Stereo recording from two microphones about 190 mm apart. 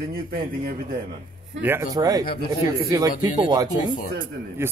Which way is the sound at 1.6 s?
15° right (ahead or behind).